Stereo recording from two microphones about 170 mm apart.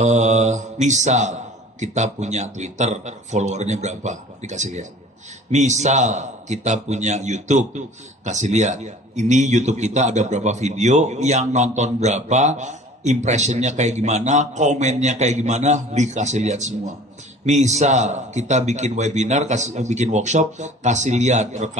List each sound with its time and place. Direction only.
0.0 s a man's voice: 45° right (ahead or behind)